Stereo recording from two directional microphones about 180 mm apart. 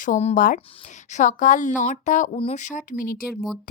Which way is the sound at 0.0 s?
40° left (ahead or behind).